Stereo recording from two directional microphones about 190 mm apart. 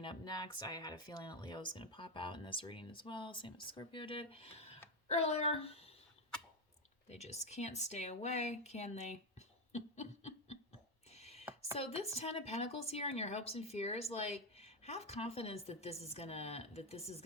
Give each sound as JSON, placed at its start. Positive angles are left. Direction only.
{"t": 0.0, "sound": "a woman's voice", "side_deg": 25}
{"t": 7.1, "sound": "a woman's voice", "side_deg": 35}
{"t": 9.7, "sound": "a sound", "side_deg": 35}
{"t": 11.1, "sound": "chopping", "side_deg": 35}
{"t": 11.8, "sound": "a woman's voice", "side_deg": 35}